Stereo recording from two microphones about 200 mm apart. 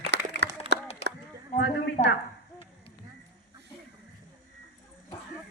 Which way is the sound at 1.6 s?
60° left (ahead or behind).